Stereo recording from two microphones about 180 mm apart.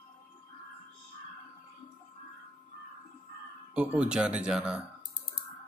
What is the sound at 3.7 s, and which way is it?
Speech, 5° right (ahead or behind).